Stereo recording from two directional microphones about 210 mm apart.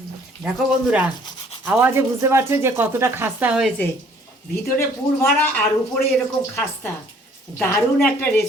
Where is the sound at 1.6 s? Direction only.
10° right (ahead or behind).